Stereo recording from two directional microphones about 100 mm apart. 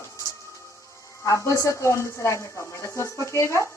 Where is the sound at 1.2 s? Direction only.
30° left (ahead or behind).